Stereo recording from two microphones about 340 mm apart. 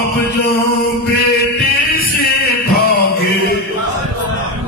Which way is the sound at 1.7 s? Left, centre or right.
Left.